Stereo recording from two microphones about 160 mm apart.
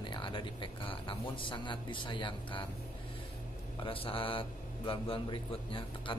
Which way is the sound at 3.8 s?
35° left (ahead or behind).